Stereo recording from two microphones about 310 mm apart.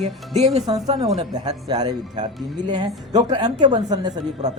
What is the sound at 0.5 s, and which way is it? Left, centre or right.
A woman's voice, centre.